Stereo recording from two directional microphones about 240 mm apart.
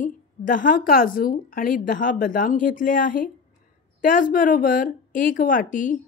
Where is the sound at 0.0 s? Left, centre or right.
Left.